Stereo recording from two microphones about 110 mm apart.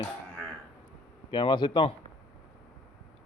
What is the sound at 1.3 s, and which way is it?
Speech, 45° left (ahead or behind).